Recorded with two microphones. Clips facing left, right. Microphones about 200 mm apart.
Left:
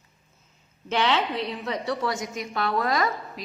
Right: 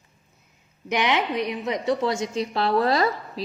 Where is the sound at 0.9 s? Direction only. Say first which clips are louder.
Right 1 dB; 15° right (ahead or behind).